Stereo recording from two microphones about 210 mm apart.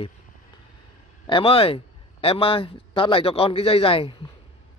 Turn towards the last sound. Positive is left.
turn(degrees=25)  # may be behind; listen again after turning